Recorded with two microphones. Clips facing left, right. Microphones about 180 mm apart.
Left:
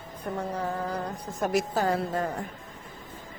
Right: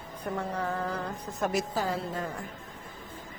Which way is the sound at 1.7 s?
50° left (ahead or behind).